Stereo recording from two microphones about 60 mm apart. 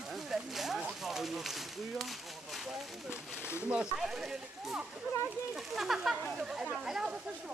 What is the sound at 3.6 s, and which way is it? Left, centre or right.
Speech, right.